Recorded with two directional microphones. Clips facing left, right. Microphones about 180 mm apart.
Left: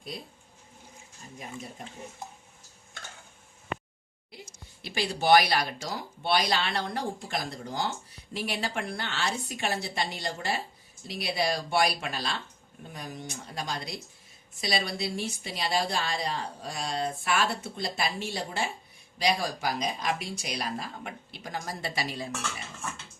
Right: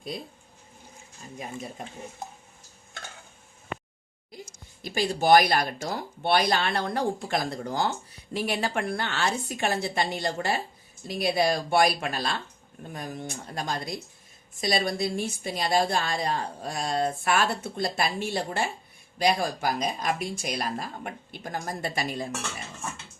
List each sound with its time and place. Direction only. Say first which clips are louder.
4.8 s a woman's voice: right 4 dB; 45° right (ahead or behind)